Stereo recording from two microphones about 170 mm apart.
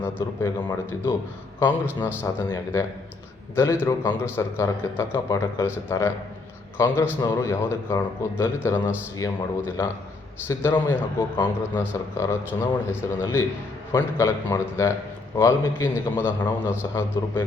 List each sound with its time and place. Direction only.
0.0 s speech: 15° left (ahead or behind)